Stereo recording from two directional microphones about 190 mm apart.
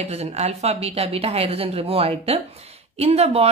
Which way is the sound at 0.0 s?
35° right (ahead or behind).